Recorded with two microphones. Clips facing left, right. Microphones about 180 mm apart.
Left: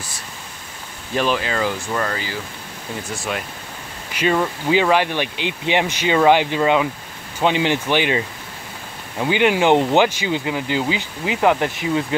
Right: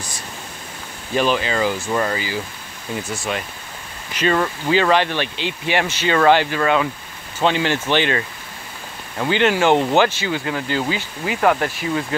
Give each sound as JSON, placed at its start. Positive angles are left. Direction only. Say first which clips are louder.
{"t": 1.1, "sound": "speech", "louder": "right 1 dB", "side_deg": 0}
{"t": 4.1, "sound": "speech", "louder": "even", "side_deg": 10}